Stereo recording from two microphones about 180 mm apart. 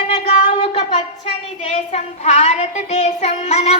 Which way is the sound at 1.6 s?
40° left (ahead or behind).